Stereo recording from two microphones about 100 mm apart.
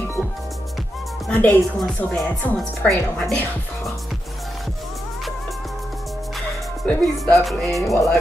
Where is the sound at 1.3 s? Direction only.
15° left (ahead or behind).